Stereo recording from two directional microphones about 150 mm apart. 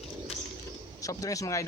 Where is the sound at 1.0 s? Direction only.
20° left (ahead or behind).